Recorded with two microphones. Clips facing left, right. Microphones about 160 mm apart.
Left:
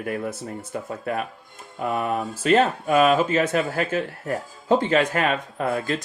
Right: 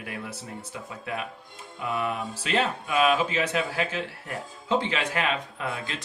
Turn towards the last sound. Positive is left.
turn(degrees=45)  # may be behind; listen again after turning